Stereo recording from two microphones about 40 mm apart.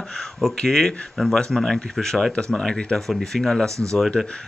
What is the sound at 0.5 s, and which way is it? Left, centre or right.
Speech, centre.